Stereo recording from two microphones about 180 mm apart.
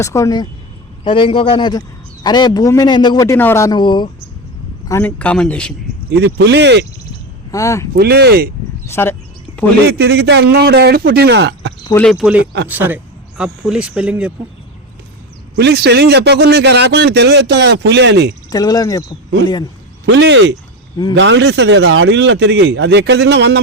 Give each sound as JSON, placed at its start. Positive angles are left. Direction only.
{"t": 0.0, "sound": "a man's voice", "side_deg": 15}
{"t": 4.9, "sound": "a man's voice", "side_deg": 10}
{"t": 6.1, "sound": "a man's voice", "side_deg": -75}
{"t": 7.5, "sound": "a man's voice", "side_deg": 15}
{"t": 7.9, "sound": "speech", "side_deg": -60}
{"t": 8.9, "sound": "a man's voice", "side_deg": 15}
{"t": 9.5, "sound": "a sound", "side_deg": 30}
{"t": 10.0, "sound": "speech", "side_deg": -70}
{"t": 12.0, "sound": "speech", "side_deg": -5}
{"t": 15.5, "sound": "a man's voice", "side_deg": -65}
{"t": 18.5, "sound": "a man's voice", "side_deg": 20}
{"t": 20.1, "sound": "a man's voice", "side_deg": -85}